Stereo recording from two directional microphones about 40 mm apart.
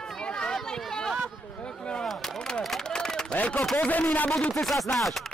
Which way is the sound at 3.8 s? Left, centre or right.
Left.